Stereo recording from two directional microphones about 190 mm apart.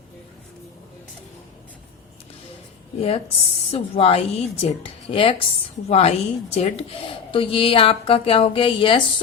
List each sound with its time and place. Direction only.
3.7 s a woman's voice: 30° left (ahead or behind)